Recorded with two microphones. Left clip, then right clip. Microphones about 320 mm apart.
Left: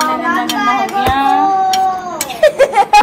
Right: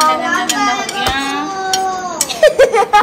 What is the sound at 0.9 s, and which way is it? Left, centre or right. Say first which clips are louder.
Music: left 5 dB; centre.